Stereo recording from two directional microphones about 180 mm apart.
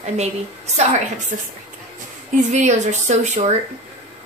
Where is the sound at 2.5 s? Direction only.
40° right (ahead or behind).